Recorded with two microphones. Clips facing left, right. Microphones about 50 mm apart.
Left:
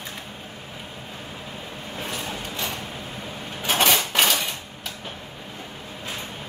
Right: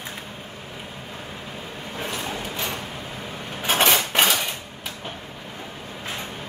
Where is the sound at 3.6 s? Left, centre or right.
Centre.